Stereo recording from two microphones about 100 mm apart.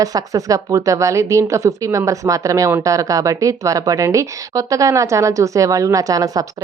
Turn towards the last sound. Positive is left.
turn(degrees=-35)  # may be behind; listen again after turning